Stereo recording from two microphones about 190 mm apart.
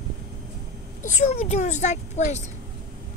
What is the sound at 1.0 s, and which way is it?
A woman's voice, 35° left (ahead or behind).